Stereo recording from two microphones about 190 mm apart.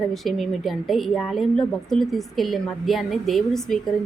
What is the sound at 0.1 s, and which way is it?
A woman's voice, centre (ahead or behind).